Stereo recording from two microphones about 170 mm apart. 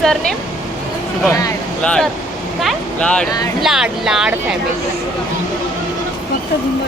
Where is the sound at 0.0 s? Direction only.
Centre (ahead or behind).